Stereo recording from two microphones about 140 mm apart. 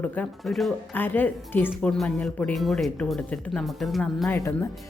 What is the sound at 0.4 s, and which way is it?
Speech, centre (ahead or behind).